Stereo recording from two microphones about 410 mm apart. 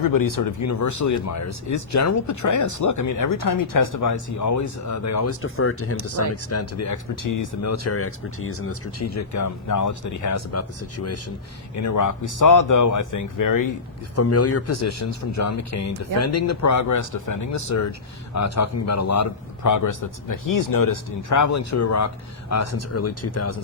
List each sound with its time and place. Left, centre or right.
0.0 s a man's voice: left
14.2 s a man's voice: left